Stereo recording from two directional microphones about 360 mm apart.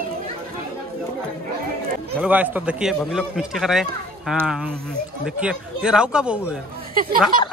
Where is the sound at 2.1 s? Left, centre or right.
Centre.